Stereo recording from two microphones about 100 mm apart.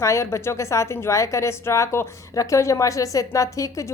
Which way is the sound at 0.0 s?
30° left (ahead or behind).